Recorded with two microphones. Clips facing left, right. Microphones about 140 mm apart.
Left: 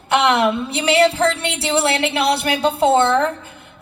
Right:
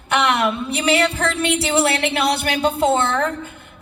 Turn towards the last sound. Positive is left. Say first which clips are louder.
# left 3 dB
turn(degrees=30)  # may be behind; listen again after turning